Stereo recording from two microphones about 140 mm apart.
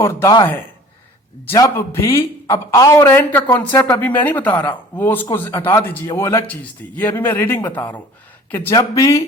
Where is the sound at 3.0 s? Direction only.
15° left (ahead or behind).